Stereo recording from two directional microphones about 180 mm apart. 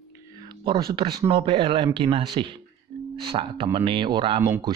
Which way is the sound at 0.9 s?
30° right (ahead or behind).